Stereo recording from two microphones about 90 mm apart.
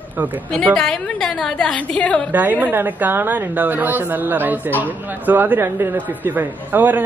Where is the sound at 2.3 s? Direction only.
20° right (ahead or behind).